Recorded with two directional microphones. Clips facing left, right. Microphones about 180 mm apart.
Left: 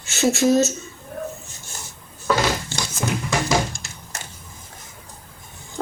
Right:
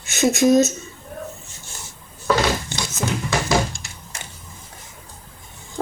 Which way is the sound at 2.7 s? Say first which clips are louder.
Even; 15° right (ahead or behind).